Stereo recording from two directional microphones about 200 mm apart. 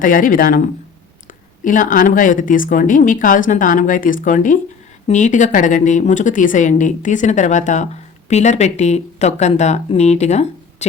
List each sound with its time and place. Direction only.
0.0 s speech: 45° left (ahead or behind)
1.6 s speech: 40° left (ahead or behind)